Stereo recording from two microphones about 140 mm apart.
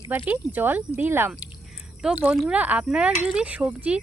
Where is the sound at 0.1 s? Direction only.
10° right (ahead or behind).